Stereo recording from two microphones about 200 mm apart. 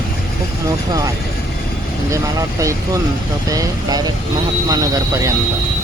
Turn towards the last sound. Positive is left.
turn(degrees=-15)  # may be behind; listen again after turning